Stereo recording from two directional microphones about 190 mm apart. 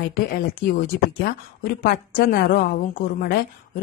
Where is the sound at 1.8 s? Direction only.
55° left (ahead or behind).